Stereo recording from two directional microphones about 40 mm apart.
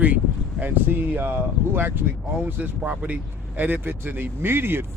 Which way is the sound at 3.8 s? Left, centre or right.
Right.